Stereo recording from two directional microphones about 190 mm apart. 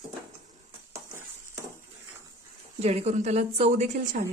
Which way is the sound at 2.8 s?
35° right (ahead or behind).